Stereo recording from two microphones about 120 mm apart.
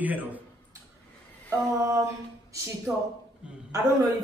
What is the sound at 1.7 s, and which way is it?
Speech, 25° right (ahead or behind).